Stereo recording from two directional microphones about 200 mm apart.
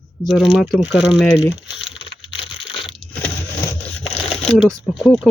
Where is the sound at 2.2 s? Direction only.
25° left (ahead or behind).